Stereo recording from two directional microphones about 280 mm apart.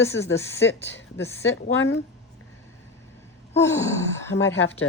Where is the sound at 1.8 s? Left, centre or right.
Left.